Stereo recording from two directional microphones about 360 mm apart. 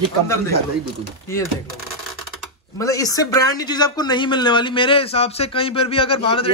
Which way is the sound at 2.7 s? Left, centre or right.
Centre.